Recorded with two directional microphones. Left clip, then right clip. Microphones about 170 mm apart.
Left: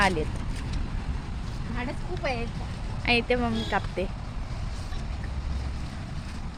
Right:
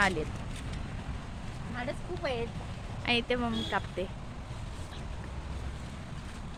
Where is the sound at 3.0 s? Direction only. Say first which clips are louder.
Left 5 dB; 10° left (ahead or behind).